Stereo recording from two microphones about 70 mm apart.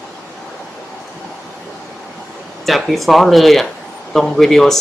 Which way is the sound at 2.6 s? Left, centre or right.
Centre.